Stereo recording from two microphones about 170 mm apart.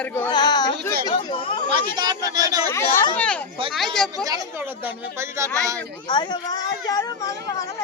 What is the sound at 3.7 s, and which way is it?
Speech, centre (ahead or behind).